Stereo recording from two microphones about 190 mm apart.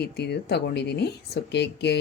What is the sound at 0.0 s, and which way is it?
Speech, 60° left (ahead or behind).